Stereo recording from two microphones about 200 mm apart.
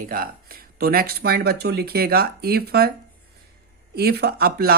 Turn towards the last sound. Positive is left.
turn(degrees=-50)  # may be behind; listen again after turning